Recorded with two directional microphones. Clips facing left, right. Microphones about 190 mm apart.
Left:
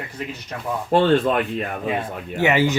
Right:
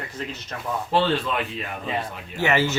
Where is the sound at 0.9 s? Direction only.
50° left (ahead or behind).